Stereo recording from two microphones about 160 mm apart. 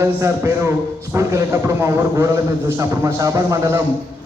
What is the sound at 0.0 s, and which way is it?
A man's voice, 20° right (ahead or behind).